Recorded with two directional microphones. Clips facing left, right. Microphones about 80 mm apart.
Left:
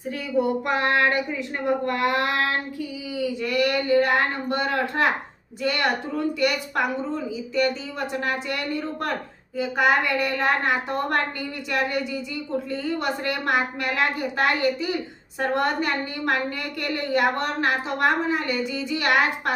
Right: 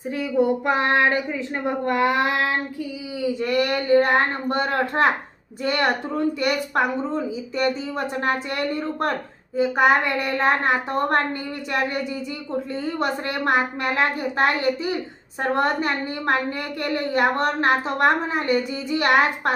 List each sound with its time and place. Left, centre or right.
0.3 s child singing: right
3.4 s a woman's voice: right
12.7 s a woman's voice: right